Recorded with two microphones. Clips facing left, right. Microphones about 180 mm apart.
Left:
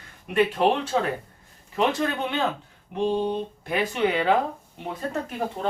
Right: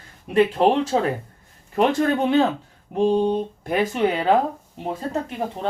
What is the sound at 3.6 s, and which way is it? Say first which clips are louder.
Speech: right 3 dB; 45° right (ahead or behind).